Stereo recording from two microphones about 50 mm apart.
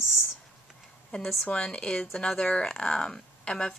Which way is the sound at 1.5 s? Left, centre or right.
Centre.